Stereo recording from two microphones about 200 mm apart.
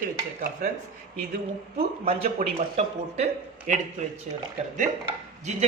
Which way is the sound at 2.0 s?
30° right (ahead or behind).